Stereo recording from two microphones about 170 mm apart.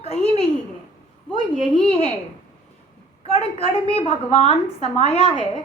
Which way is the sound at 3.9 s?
35° left (ahead or behind).